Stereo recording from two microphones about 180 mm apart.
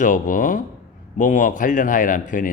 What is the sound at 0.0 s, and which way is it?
A man's voice, 45° left (ahead or behind).